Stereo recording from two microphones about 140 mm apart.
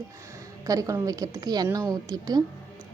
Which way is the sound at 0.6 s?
25° right (ahead or behind).